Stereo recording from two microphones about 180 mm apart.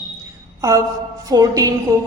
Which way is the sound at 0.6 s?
15° right (ahead or behind).